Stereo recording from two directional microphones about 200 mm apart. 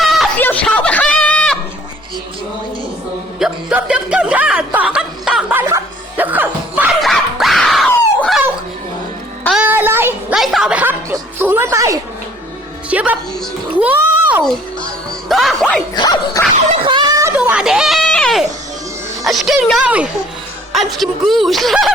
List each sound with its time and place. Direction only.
0.0 s a sound: centre (ahead or behind)
3.3 s chuckle: 5° right (ahead or behind)
9.4 s music: centre (ahead or behind)
9.6 s music: 10° right (ahead or behind)
15.3 s music: centre (ahead or behind)
16.0 s dog: 20° left (ahead or behind)
16.6 s screaming: 25° right (ahead or behind); by 18.4 s 5° left (ahead or behind)
19.2 s a sound: centre (ahead or behind)
20.7 s speech: centre (ahead or behind)